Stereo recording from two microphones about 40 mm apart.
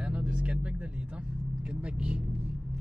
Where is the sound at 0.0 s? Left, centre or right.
Right.